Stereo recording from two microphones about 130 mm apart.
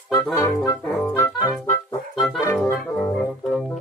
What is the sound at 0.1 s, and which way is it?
Music, 25° left (ahead or behind).